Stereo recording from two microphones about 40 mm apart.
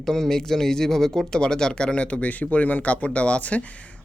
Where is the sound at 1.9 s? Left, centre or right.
Left.